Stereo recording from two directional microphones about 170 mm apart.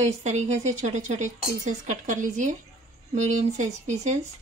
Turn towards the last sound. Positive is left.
turn(degrees=-45)  # may be behind; listen again after turning